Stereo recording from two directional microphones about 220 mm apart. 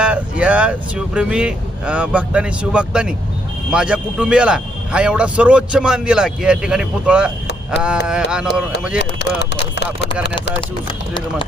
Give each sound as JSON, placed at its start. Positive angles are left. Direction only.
{"t": 0.0, "sound": "speech", "side_deg": -5}
{"t": 9.0, "sound": "speech", "side_deg": 50}
{"t": 10.6, "sound": "speech", "side_deg": 20}